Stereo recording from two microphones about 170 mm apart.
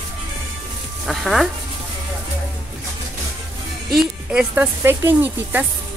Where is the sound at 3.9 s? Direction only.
5° right (ahead or behind).